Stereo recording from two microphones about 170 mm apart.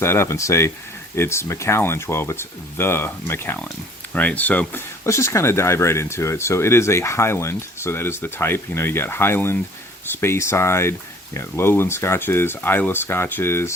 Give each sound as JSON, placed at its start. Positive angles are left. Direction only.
{"t": 0.0, "sound": "speech", "side_deg": 15}